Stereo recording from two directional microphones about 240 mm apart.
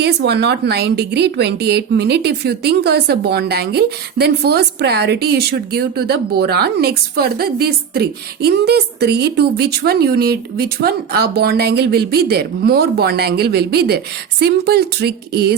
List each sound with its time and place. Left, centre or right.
0.0 s speech: right